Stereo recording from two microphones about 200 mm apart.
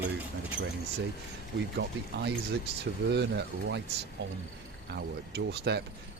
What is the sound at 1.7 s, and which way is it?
Speech, 55° right (ahead or behind).